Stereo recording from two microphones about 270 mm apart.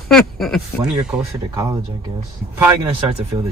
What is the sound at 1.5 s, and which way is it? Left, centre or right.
Speech, centre.